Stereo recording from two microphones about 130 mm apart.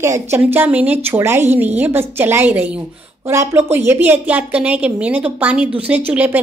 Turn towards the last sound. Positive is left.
turn(degrees=-10)  # may be behind; listen again after turning